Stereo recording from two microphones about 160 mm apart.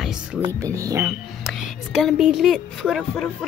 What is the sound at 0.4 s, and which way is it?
Speech, 20° right (ahead or behind).